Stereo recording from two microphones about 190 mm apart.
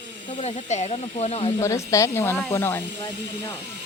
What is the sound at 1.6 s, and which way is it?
Speech, 15° left (ahead or behind).